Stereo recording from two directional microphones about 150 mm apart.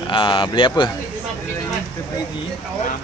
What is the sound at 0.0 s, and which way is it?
Speech, 35° left (ahead or behind).